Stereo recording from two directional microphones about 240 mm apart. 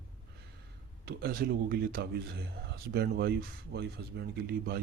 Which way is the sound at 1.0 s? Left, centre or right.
Right.